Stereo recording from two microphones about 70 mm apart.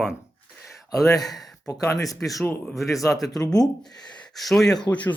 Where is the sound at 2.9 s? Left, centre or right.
Left.